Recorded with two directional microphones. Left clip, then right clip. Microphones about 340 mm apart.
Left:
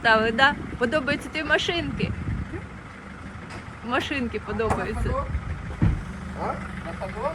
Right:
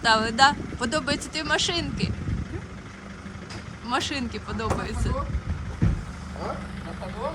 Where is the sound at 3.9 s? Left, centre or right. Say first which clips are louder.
Left 1 dB; centre.